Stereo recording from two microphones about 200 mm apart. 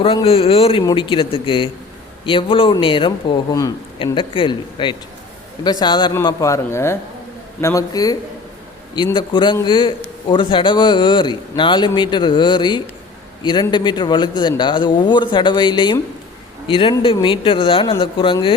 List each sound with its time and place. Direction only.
0.0 s a man's voice: 25° left (ahead or behind)